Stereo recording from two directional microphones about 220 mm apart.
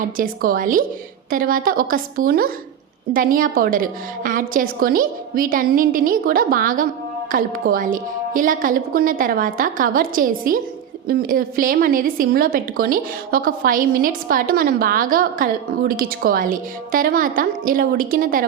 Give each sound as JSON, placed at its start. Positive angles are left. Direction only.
{"t": 0.2, "sound": "a woman's voice", "side_deg": -40}